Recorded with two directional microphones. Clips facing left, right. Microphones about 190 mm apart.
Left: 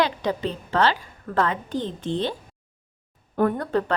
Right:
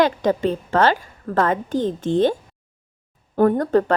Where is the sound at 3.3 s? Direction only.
40° right (ahead or behind).